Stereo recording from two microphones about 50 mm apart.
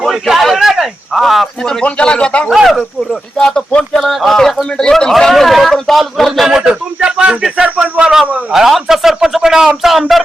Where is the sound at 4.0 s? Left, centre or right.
Centre.